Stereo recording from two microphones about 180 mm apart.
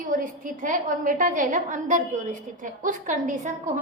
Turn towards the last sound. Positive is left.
turn(degrees=-45)  # may be behind; listen again after turning